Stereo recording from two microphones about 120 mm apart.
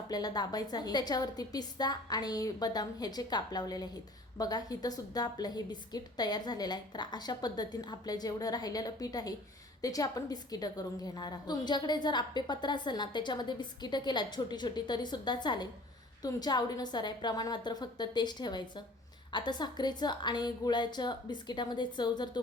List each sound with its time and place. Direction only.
0.1 s a woman's voice: 35° left (ahead or behind)